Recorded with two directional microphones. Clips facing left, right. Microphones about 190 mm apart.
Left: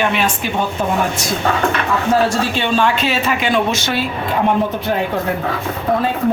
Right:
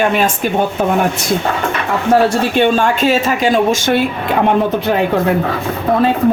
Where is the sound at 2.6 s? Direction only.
50° right (ahead or behind).